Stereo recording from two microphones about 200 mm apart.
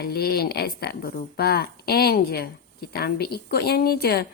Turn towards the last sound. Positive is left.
turn(degrees=50)  # may be behind; listen again after turning